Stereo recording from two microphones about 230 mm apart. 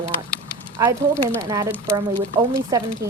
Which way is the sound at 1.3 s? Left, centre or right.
Centre.